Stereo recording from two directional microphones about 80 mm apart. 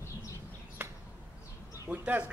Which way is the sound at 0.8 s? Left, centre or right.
Right.